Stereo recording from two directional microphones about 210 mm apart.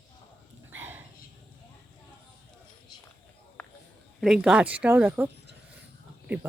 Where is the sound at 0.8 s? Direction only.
10° right (ahead or behind).